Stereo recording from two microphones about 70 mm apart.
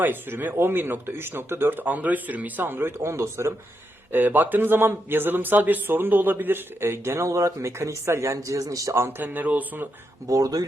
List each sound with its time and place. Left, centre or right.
0.0 s speech: right
4.1 s speech: right
7.3 s speech: right
9.0 s speech: right
10.2 s speech: right